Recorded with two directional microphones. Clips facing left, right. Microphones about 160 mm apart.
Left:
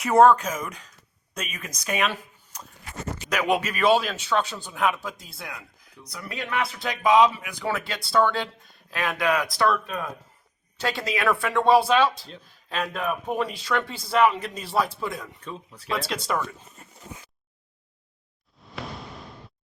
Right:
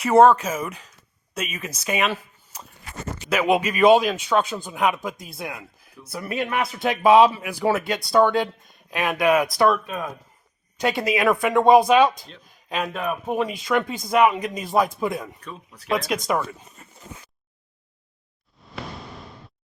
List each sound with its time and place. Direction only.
0.0 s speech: 5° right (ahead or behind)
2.9 s a sound: 90° right
3.2 s speech: 5° right (ahead or behind)
5.2 s speech: 20° right (ahead or behind)
12.1 s speech: 30° left (ahead or behind)
12.6 s speech: 10° right (ahead or behind)
18.6 s a sound: centre (ahead or behind)